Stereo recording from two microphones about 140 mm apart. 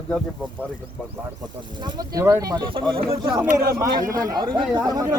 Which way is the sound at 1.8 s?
30° right (ahead or behind).